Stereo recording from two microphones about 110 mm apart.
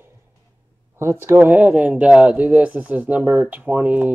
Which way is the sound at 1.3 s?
15° right (ahead or behind).